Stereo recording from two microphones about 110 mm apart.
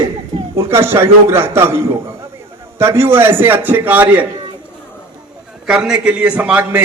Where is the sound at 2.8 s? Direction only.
25° right (ahead or behind).